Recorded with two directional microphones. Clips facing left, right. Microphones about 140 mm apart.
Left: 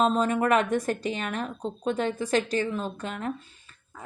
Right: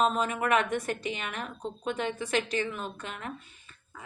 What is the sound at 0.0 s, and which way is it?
A woman's voice, 40° left (ahead or behind).